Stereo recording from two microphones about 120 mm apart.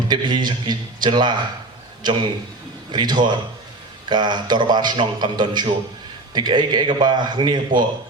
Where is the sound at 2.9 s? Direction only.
35° right (ahead or behind).